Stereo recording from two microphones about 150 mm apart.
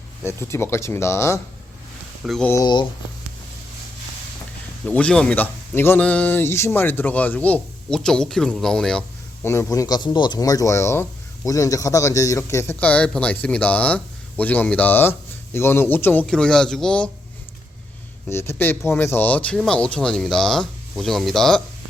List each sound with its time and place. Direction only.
0.2 s speech: 15° left (ahead or behind)
2.2 s speech: centre (ahead or behind)
4.9 s speech: 10° left (ahead or behind)
9.5 s speech: 20° left (ahead or behind)
18.3 s speech: 15° left (ahead or behind)